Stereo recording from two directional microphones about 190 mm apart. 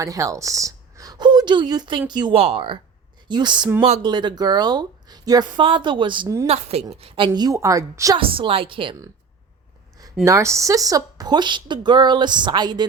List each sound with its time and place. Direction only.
0.0 s a woman's voice: 15° right (ahead or behind)
7.3 s a woman's voice: 20° right (ahead or behind)
8.2 s a woman's voice: 30° right (ahead or behind)
10.2 s a woman's voice: 15° right (ahead or behind)